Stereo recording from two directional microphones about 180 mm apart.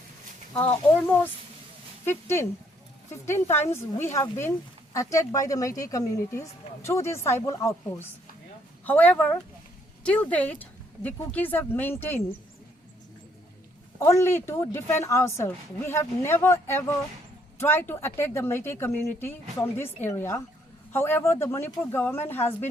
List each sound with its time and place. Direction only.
0.5 s a woman's voice: 10° left (ahead or behind)
14.0 s a woman's voice: 15° left (ahead or behind)